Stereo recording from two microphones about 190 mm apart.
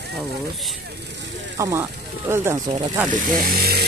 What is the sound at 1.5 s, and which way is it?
Speech, 15° right (ahead or behind).